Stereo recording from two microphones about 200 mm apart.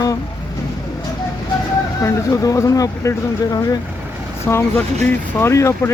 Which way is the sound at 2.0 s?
15° left (ahead or behind).